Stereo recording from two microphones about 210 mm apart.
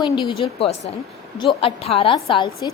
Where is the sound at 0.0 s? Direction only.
25° left (ahead or behind).